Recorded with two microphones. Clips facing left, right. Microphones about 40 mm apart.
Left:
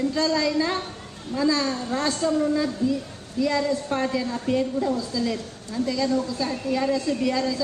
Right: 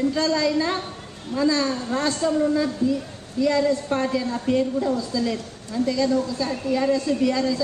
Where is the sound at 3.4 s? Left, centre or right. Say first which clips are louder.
Right 3 dB; centre.